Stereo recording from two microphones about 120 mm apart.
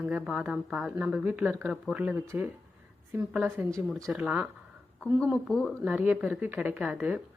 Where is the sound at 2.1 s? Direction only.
20° right (ahead or behind).